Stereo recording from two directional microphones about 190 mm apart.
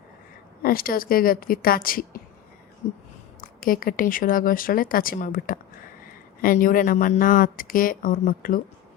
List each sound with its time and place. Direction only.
0.6 s speech: 50° left (ahead or behind)
3.4 s speech: 50° left (ahead or behind)